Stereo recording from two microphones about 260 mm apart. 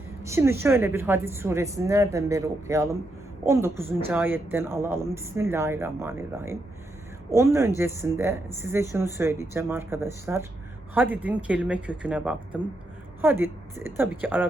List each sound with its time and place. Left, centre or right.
0.2 s a woman's voice: centre